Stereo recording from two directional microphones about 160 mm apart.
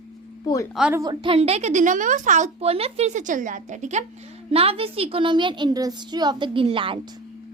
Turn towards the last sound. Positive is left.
turn(degrees=-35)  # may be behind; listen again after turning